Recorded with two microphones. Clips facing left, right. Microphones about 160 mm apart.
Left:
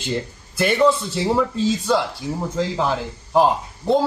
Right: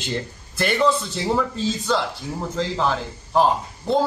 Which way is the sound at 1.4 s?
5° left (ahead or behind).